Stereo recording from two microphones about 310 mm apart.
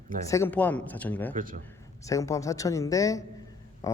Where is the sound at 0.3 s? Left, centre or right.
Centre.